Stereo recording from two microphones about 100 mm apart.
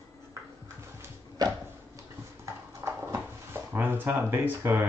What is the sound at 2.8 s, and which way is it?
Drawer open or close, 25° right (ahead or behind).